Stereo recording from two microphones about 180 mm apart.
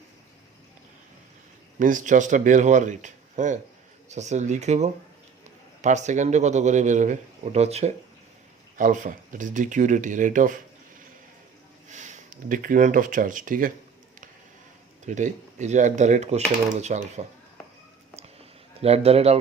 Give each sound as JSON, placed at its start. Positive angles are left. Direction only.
{"t": 1.8, "sound": "a man's voice", "side_deg": -45}
{"t": 8.8, "sound": "speech", "side_deg": -45}
{"t": 11.9, "sound": "speech", "side_deg": -40}
{"t": 15.0, "sound": "a man's voice", "side_deg": -45}
{"t": 18.8, "sound": "a man's voice", "side_deg": -35}